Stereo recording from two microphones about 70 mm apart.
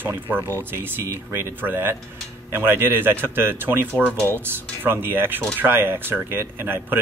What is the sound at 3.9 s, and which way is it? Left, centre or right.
Speech, centre.